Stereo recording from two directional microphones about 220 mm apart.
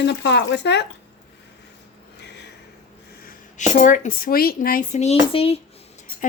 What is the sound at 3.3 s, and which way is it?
Speech, 35° left (ahead or behind).